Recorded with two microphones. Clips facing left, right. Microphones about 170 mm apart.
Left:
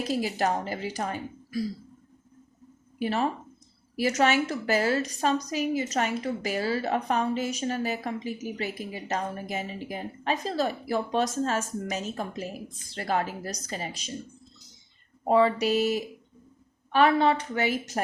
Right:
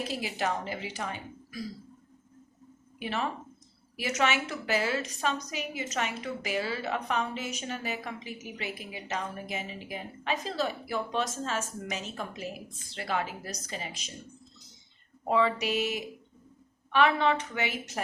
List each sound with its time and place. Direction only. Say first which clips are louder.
0.0 s a woman's voice: left 5 dB; 40° left (ahead or behind)
3.0 s a woman's voice: left 6 dB; 40° left (ahead or behind)
15.3 s a woman's voice: left 5 dB; 40° left (ahead or behind)